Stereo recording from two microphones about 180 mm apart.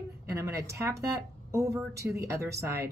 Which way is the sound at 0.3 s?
15° right (ahead or behind).